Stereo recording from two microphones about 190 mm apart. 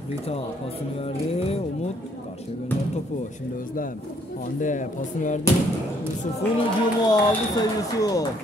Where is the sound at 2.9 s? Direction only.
40° left (ahead or behind).